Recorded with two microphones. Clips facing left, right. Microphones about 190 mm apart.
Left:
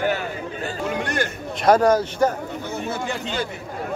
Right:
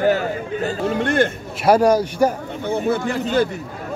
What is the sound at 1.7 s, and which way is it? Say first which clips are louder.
Speech: right 2 dB; 10° right (ahead or behind).